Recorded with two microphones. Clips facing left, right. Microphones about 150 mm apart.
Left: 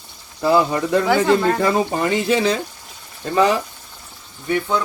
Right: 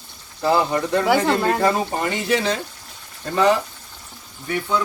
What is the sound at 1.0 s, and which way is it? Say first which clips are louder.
Speech: left 2 dB; 10° right (ahead or behind).